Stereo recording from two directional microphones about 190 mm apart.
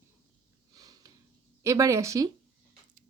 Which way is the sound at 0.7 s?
20° right (ahead or behind).